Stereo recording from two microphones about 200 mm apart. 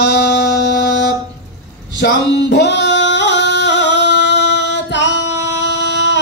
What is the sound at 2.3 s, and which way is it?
Music, 60° left (ahead or behind).